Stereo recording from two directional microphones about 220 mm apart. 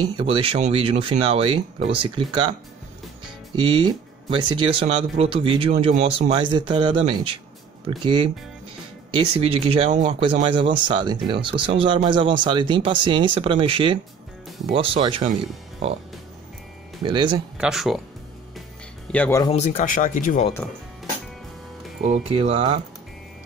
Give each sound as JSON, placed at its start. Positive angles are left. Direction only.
{"t": 0.2, "sound": "speech", "side_deg": -25}
{"t": 3.5, "sound": "speech", "side_deg": -20}
{"t": 10.5, "sound": "speech", "side_deg": -20}
{"t": 17.0, "sound": "speech", "side_deg": -20}
{"t": 17.6, "sound": "speech", "side_deg": 0}
{"t": 19.1, "sound": "speech", "side_deg": 5}
{"t": 19.5, "sound": "speech", "side_deg": 35}
{"t": 22.0, "sound": "speech", "side_deg": -30}